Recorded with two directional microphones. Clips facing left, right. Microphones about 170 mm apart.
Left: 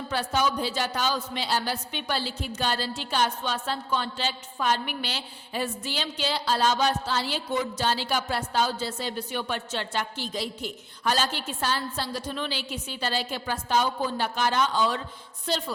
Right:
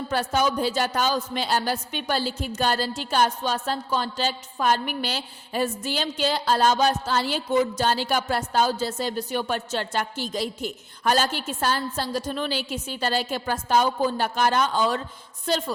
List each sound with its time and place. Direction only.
0.1 s a woman's voice: 45° right (ahead or behind)